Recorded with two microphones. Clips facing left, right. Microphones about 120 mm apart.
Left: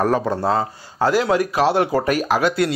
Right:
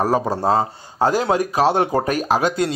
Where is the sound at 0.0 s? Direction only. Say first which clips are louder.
Even; 20° right (ahead or behind).